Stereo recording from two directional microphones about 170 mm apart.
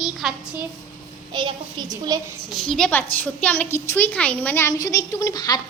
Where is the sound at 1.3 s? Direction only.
25° right (ahead or behind).